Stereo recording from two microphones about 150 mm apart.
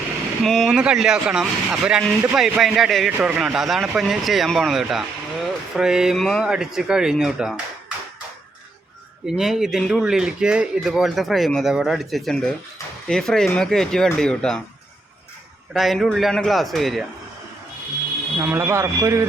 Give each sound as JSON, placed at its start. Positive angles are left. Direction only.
{"t": 0.4, "sound": "speech", "side_deg": 0}
{"t": 9.2, "sound": "speech", "side_deg": -5}
{"t": 15.7, "sound": "speech", "side_deg": 0}
{"t": 18.3, "sound": "speech", "side_deg": -15}